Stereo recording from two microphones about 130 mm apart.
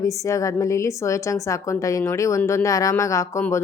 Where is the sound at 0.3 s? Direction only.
25° left (ahead or behind).